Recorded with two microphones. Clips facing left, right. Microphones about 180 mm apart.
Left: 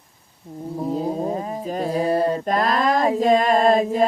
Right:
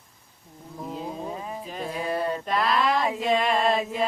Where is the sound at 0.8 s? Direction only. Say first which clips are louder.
Left 9 dB; 40° left (ahead or behind).